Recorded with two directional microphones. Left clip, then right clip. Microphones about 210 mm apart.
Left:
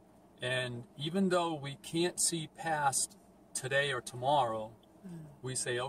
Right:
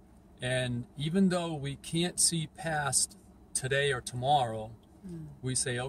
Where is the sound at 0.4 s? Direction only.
20° right (ahead or behind).